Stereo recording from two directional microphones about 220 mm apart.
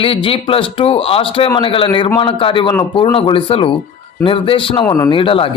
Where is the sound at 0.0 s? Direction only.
25° left (ahead or behind).